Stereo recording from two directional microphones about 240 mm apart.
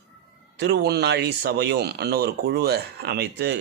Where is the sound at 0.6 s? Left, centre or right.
Right.